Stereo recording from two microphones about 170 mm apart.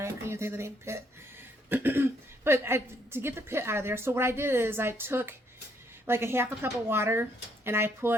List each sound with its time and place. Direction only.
0.0 s speech: 15° right (ahead or behind)